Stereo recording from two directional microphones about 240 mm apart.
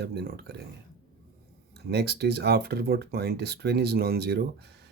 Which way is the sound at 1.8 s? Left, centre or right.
Right.